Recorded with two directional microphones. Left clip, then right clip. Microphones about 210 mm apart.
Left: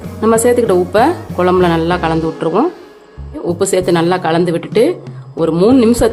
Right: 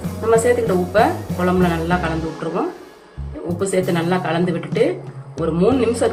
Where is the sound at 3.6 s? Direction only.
55° left (ahead or behind).